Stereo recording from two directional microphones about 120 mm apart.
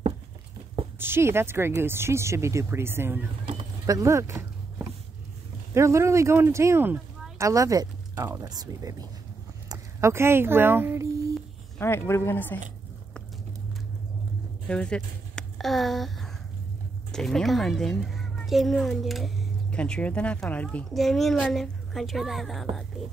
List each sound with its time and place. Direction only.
0.9 s speech: 20° right (ahead or behind)
3.8 s a sound: 25° right (ahead or behind)
5.8 s speech: 25° right (ahead or behind)
9.9 s speech: 20° right (ahead or behind)
11.8 s speech: 20° left (ahead or behind)
14.7 s speech: 10° left (ahead or behind)
15.3 s a sound: centre (ahead or behind)
17.1 s a child's voice: 5° left (ahead or behind)